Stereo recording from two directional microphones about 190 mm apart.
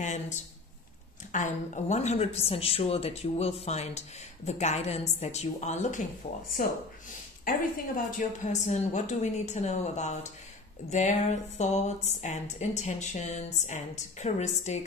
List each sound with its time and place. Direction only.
0.0 s a sound: 40° left (ahead or behind)
1.3 s a woman's voice: 40° left (ahead or behind)
7.4 s a woman's voice: 45° left (ahead or behind)